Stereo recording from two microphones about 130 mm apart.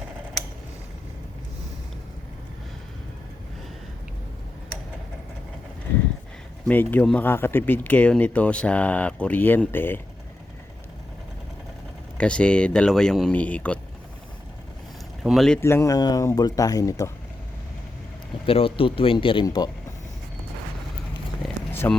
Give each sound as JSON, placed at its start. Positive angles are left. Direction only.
{"t": 6.7, "sound": "speech", "side_deg": 10}
{"t": 12.1, "sound": "speech", "side_deg": 10}
{"t": 15.2, "sound": "speech", "side_deg": 0}
{"t": 15.6, "sound": "speech", "side_deg": 20}
{"t": 18.4, "sound": "speech", "side_deg": 45}
{"t": 21.7, "sound": "a sound", "side_deg": 15}